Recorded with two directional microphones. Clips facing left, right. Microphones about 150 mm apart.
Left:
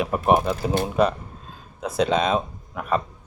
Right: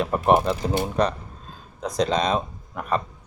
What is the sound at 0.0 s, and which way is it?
A man's voice, 5° left (ahead or behind).